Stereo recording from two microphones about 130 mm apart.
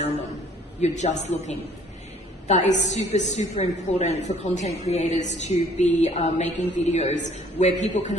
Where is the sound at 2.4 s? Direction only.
60° left (ahead or behind).